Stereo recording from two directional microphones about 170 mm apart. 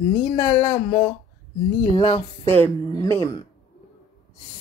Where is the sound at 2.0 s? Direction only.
40° left (ahead or behind).